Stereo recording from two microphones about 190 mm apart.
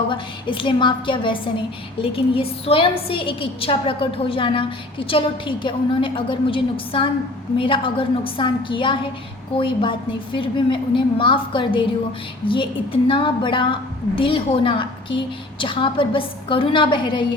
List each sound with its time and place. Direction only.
0.1 s a woman's voice: 25° left (ahead or behind)